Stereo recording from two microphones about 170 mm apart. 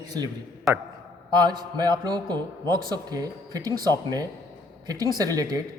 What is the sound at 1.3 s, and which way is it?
A man's voice, 25° right (ahead or behind).